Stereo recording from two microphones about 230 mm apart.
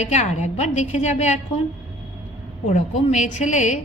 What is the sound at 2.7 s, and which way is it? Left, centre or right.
A woman's voice, left.